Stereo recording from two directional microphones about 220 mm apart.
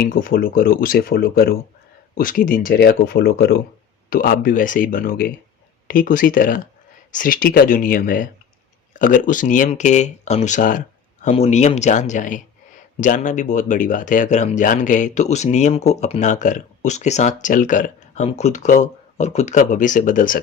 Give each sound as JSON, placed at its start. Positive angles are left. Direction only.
{"t": 0.0, "sound": "speech", "side_deg": 40}